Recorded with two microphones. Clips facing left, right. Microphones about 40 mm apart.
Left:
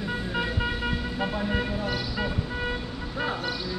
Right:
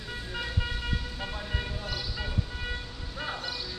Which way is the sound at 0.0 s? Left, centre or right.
Centre.